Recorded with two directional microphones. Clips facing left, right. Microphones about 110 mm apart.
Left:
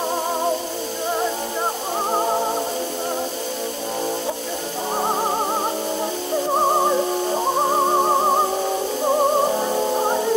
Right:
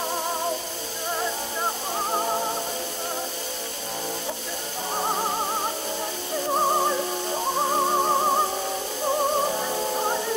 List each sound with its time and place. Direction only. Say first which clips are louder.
2.1 s music: left 5 dB; 25° left (ahead or behind)
6.5 s music: left 4 dB; 20° left (ahead or behind)